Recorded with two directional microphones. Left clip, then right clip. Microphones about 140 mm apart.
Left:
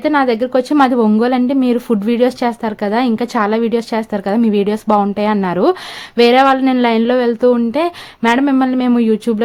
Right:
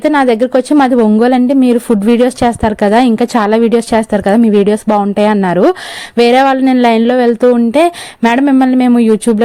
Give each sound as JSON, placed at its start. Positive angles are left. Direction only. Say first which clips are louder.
{"t": 0.0, "sound": "speech", "louder": "right 4 dB", "side_deg": -45}